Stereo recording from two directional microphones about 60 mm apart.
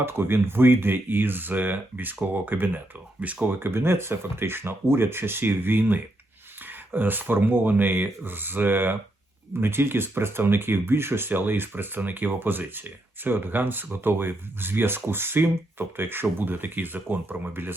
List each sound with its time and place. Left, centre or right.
0.0 s speech: right
3.4 s speech: right